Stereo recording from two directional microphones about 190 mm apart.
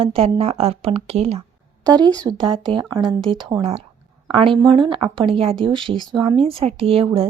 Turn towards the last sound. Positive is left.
turn(degrees=-30)  # may be behind; listen again after turning